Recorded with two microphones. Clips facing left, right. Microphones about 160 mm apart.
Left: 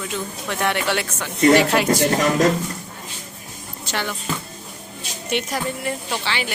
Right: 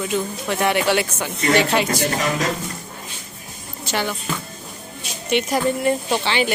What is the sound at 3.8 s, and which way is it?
Music, 5° right (ahead or behind).